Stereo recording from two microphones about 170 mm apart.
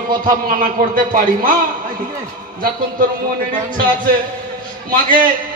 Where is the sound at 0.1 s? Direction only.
55° right (ahead or behind).